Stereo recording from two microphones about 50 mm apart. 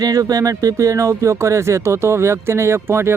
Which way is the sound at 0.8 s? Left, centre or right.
Right.